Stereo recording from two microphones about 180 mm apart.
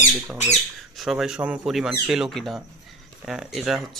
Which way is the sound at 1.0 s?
5° right (ahead or behind).